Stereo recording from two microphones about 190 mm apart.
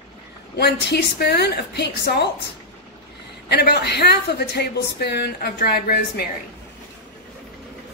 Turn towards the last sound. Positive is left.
turn(degrees=55)  # may be behind; listen again after turning